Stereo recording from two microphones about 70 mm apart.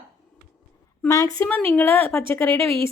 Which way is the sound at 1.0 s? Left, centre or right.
Left.